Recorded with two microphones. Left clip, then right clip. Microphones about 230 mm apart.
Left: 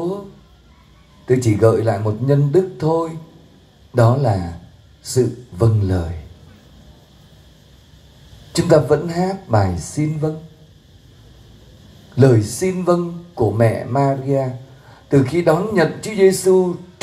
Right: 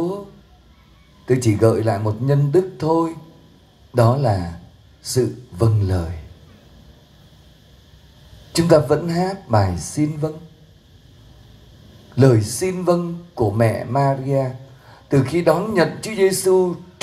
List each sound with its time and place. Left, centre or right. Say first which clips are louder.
1.2 s speech: left 2 dB; right
8.5 s speech: left 1 dB; right
12.2 s speech: left 2 dB; right